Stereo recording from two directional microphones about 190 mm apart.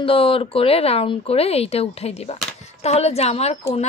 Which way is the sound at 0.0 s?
30° left (ahead or behind).